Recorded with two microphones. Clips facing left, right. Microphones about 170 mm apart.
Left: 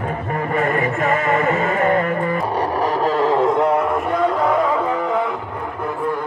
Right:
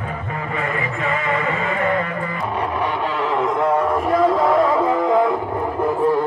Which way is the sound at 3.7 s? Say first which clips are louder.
Right 1 dB; centre (ahead or behind).